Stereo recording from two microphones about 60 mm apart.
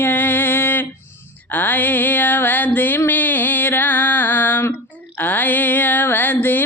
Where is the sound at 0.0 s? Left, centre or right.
Left.